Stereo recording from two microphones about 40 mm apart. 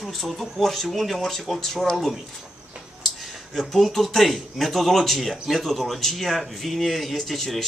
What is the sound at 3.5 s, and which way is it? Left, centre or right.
Speech, centre.